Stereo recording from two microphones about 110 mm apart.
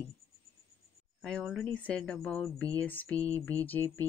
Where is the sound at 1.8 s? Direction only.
10° left (ahead or behind).